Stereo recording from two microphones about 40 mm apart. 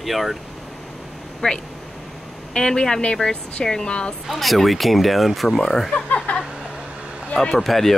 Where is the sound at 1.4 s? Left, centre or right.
Left.